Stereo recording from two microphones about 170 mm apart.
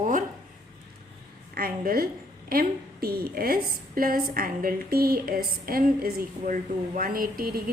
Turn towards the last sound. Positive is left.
turn(degrees=-60)  # may be behind; listen again after turning